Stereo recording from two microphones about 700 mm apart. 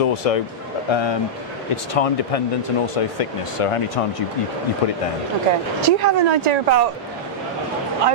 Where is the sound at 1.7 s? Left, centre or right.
Left.